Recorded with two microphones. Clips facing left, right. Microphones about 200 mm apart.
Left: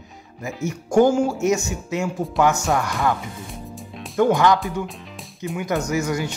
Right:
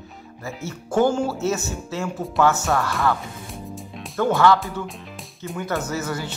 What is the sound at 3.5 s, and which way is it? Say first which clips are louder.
Music: right 1 dB; centre (ahead or behind).